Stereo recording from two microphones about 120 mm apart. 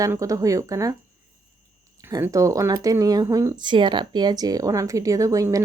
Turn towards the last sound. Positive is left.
turn(degrees=-30)  # may be behind; listen again after turning